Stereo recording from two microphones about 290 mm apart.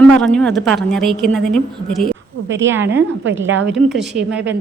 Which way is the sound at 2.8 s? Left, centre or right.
Right.